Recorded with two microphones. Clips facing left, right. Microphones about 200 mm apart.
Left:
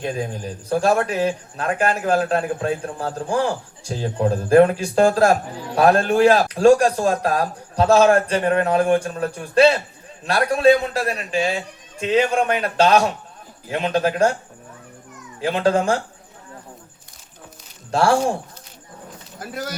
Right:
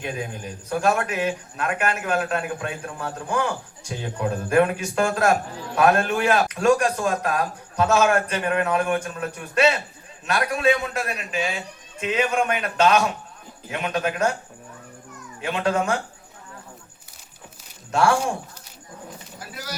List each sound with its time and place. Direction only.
0.0 s a man's voice: 35° left (ahead or behind)
15.4 s a man's voice: 35° left (ahead or behind)
17.9 s a man's voice: 35° left (ahead or behind)
19.4 s speech: 50° left (ahead or behind)